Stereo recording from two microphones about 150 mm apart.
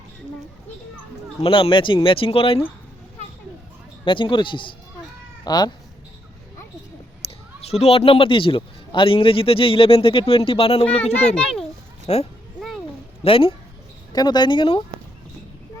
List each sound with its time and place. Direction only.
1.4 s a man's voice: 40° left (ahead or behind)
4.0 s a man's voice: 35° left (ahead or behind)
7.2 s a sound: 40° left (ahead or behind)
7.6 s a man's voice: 45° left (ahead or behind)
11.3 s a child's voice: 5° left (ahead or behind)
12.0 s a child's voice: 40° left (ahead or behind)
12.5 s a sound: centre (ahead or behind)
13.2 s a man's voice: 35° left (ahead or behind)